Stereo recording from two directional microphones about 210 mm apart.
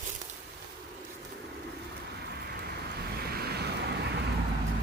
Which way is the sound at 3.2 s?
45° right (ahead or behind).